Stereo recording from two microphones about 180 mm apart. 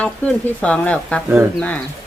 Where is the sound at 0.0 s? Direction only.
5° left (ahead or behind).